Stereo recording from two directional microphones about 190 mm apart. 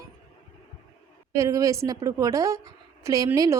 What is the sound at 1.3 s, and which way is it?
A woman's voice, 15° right (ahead or behind).